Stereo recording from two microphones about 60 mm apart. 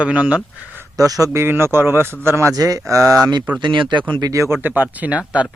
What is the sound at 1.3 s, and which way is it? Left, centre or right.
Speech, right.